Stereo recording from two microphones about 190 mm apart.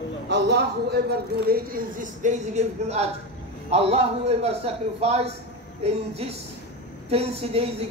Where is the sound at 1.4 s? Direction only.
50° right (ahead or behind); by 5.2 s 30° right (ahead or behind).